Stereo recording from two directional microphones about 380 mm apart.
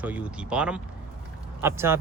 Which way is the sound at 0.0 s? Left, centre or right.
Centre.